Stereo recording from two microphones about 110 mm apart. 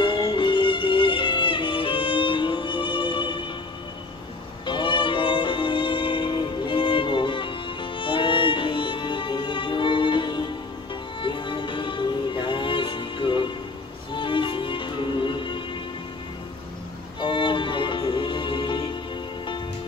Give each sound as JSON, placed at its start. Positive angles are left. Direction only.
{"t": 0.0, "sound": "music", "side_deg": 50}
{"t": 4.6, "sound": "music", "side_deg": 50}
{"t": 17.2, "sound": "music", "side_deg": 50}